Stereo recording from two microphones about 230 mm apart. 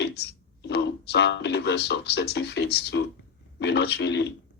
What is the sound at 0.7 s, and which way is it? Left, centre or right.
Speech, left.